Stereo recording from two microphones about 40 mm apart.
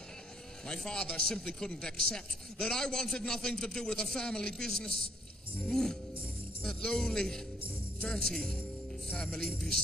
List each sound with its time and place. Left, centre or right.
0.7 s a man's voice: centre
5.7 s music: centre
6.8 s a man's voice: centre